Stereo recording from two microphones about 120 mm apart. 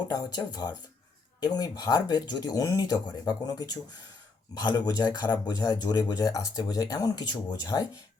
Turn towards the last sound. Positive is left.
turn(degrees=35)  # may be behind; listen again after turning